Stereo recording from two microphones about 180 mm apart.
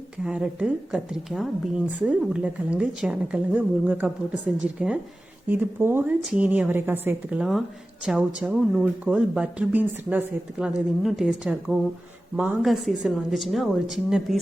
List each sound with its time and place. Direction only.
0.2 s a woman's voice: 5° right (ahead or behind)